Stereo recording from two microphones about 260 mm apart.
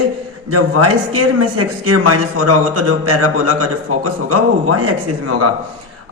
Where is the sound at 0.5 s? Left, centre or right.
Right.